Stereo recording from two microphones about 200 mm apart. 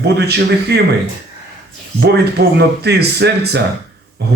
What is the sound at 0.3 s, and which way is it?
Speech, 55° right (ahead or behind).